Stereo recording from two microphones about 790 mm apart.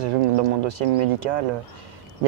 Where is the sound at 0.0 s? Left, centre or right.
Right.